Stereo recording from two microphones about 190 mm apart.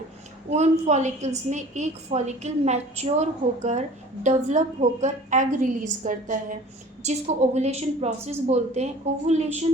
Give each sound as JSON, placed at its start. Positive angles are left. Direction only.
{"t": 0.5, "sound": "a woman's voice", "side_deg": -35}